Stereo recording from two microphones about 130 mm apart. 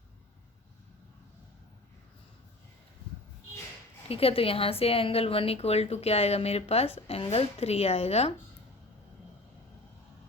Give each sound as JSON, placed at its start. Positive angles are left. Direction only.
{"t": 4.1, "sound": "a woman's voice", "side_deg": 45}